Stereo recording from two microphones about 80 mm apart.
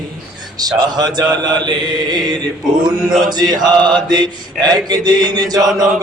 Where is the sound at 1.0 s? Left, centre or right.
Right.